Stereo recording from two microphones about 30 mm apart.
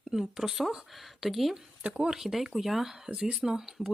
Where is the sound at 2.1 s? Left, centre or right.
Centre.